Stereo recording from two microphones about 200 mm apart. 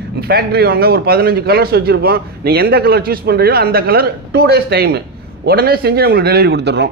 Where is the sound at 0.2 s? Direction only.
50° right (ahead or behind).